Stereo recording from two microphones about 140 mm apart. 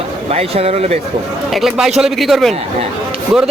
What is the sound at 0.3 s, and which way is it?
Speech, 45° right (ahead or behind).